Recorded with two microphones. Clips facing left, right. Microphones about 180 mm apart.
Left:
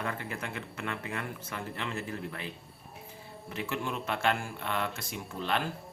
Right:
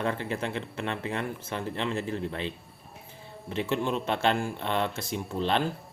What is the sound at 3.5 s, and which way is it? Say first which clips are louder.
Speech: right 6 dB; 25° right (ahead or behind).